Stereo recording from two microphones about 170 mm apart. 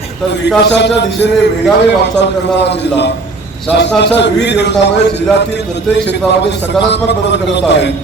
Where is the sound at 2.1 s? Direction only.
90° left.